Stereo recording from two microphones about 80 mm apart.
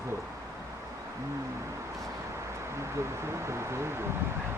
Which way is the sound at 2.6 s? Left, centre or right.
Right.